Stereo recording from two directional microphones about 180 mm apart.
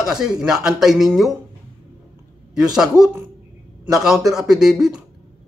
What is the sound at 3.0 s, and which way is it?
Speech, 20° right (ahead or behind).